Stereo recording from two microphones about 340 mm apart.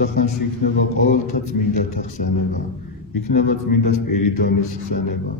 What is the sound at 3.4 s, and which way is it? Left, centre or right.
A man's voice, left.